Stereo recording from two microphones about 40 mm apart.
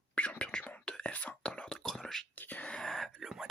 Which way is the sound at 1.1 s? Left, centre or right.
Left.